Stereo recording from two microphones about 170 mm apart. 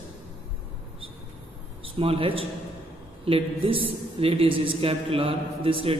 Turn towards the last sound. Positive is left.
turn(degrees=-35)  # may be behind; listen again after turning